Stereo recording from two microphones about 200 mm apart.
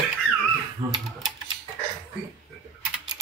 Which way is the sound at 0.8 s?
20° right (ahead or behind).